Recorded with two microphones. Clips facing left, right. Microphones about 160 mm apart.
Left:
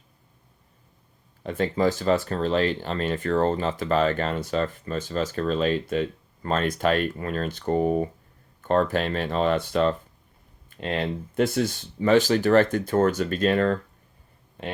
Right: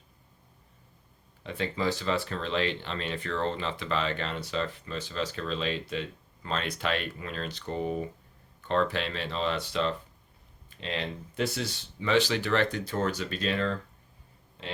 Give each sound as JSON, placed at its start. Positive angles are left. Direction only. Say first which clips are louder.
{"t": 1.5, "sound": "speech", "louder": "left 7 dB", "side_deg": 45}